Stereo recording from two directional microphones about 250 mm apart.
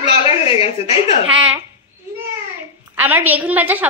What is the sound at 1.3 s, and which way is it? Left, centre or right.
Speech, centre.